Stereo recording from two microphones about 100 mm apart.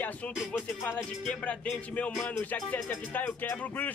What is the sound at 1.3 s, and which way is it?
Speech, 5° left (ahead or behind).